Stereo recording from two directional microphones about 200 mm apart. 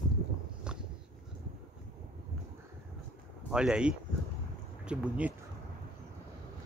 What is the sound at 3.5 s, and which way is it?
Speech, 5° right (ahead or behind).